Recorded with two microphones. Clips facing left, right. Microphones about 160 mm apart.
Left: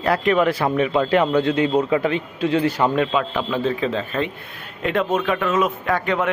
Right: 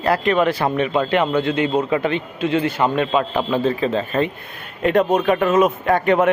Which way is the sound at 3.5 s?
40° right (ahead or behind).